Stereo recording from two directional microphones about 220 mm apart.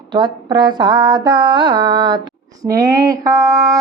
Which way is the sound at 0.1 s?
20° right (ahead or behind).